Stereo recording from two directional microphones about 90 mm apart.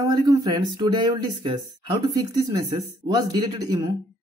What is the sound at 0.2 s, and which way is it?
Speech, 45° right (ahead or behind).